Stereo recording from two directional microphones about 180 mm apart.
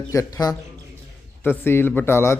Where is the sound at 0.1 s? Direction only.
20° left (ahead or behind).